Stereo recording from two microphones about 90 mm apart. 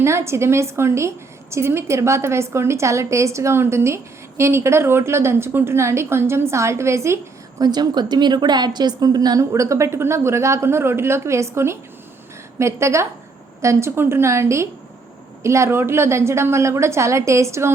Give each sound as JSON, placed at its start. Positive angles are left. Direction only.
{"t": 0.0, "sound": "a woman's voice", "side_deg": -30}
{"t": 7.6, "sound": "a woman's voice", "side_deg": -50}